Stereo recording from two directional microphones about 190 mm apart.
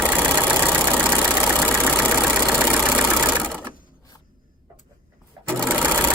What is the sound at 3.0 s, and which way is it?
Engine, 10° right (ahead or behind).